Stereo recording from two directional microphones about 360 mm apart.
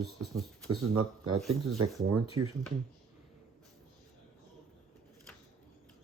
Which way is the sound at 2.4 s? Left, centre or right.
Right.